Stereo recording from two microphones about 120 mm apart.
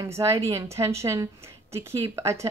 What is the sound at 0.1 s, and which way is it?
Speech, 25° right (ahead or behind).